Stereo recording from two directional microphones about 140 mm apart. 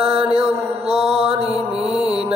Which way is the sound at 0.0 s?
45° right (ahead or behind).